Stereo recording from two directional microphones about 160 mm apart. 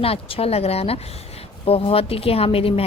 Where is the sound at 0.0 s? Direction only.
35° left (ahead or behind).